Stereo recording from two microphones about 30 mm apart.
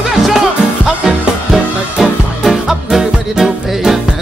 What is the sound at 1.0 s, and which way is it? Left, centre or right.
Music, right.